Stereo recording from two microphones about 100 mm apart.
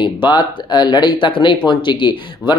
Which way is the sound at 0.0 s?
50° left (ahead or behind).